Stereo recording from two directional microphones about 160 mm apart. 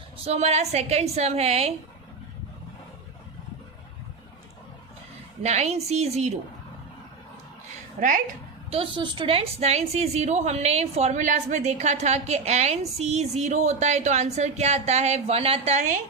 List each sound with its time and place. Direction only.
0.3 s a woman's voice: 45° right (ahead or behind)
5.4 s a woman's voice: 45° right (ahead or behind)
7.9 s a woman's voice: 55° right (ahead or behind)
8.7 s a woman's voice: 35° right (ahead or behind)